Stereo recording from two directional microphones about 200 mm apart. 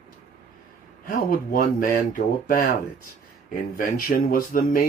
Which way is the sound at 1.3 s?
45° left (ahead or behind).